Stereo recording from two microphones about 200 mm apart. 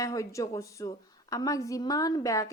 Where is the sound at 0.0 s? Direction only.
15° left (ahead or behind).